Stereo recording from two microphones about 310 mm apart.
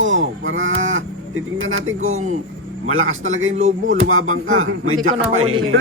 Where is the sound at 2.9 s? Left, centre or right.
Right.